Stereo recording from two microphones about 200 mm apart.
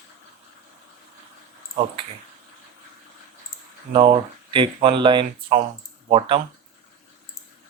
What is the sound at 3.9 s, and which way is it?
Speech, 25° right (ahead or behind).